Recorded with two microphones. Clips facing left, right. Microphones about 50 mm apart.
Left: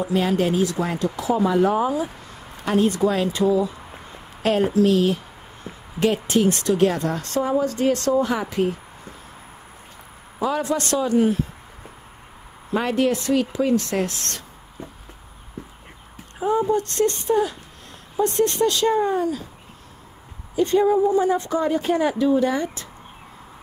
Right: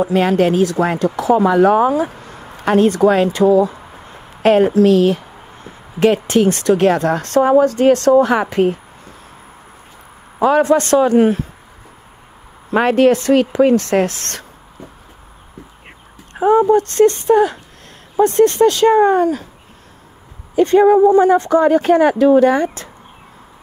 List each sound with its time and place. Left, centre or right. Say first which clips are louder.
0.0 s speech: right 7 dB; right
2.1 s speech: right 5 dB; right
10.4 s a man's voice: right 10 dB; right
12.7 s speech: right 9 dB; right
16.3 s speech: right 9 dB; right
16.8 s a man's voice: right 9 dB; right
17.3 s speech: right 8 dB; right
20.5 s speech: right 8 dB; right